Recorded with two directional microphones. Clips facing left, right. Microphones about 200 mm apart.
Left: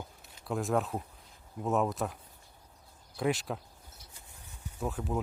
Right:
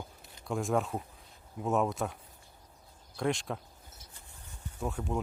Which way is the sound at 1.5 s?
Centre (ahead or behind).